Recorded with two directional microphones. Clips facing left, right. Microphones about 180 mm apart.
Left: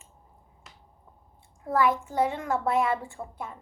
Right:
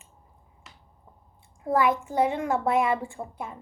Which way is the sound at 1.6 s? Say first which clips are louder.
Right 1 dB; 15° right (ahead or behind).